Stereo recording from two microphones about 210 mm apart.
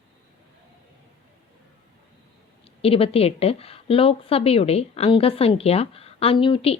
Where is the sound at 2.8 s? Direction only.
25° left (ahead or behind).